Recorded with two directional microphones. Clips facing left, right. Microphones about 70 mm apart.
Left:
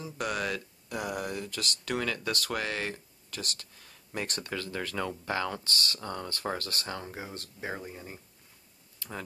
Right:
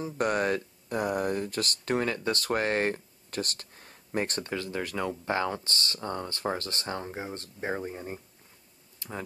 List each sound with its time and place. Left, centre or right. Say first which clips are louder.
0.0 s speech: right 5 dB; right
4.5 s speech: right 2 dB; right